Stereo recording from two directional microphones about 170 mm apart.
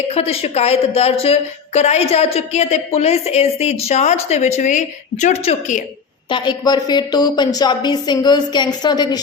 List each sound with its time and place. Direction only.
0.1 s a woman's voice: 35° left (ahead or behind)
6.2 s a woman's voice: 30° left (ahead or behind)